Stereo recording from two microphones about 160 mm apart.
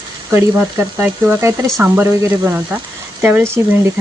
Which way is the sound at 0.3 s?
15° right (ahead or behind).